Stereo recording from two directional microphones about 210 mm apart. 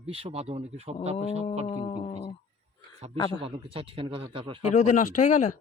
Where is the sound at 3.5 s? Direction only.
25° right (ahead or behind).